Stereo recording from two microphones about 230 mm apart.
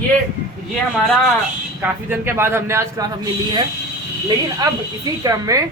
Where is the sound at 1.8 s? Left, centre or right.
Centre.